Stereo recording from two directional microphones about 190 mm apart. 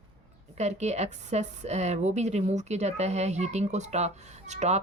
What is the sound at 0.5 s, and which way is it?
A woman's voice, 35° right (ahead or behind).